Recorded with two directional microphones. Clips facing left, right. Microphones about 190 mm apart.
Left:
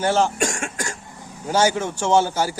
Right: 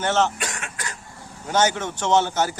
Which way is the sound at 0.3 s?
45° left (ahead or behind).